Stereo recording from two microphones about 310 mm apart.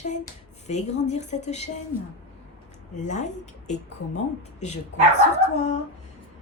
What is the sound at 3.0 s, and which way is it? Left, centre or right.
Speech, left.